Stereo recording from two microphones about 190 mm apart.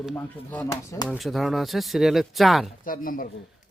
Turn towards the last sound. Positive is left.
turn(degrees=45)  # may be behind; listen again after turning